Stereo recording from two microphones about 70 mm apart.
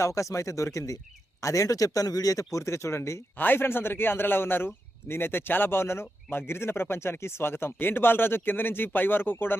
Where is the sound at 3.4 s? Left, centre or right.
Left.